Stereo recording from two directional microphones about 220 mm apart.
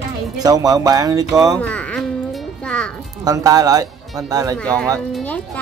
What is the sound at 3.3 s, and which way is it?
Speech, 15° right (ahead or behind).